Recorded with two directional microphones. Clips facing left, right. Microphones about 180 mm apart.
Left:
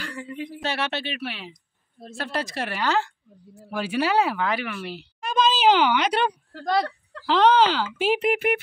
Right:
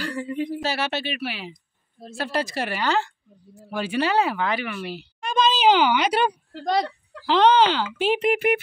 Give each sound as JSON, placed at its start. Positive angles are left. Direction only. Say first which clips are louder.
{"t": 0.0, "sound": "speech", "louder": "right 6 dB", "side_deg": -35}
{"t": 0.6, "sound": "speech", "louder": "right 2 dB", "side_deg": -5}
{"t": 6.5, "sound": "speech", "louder": "right 1 dB", "side_deg": -20}
{"t": 7.2, "sound": "speech", "louder": "right 1 dB", "side_deg": 0}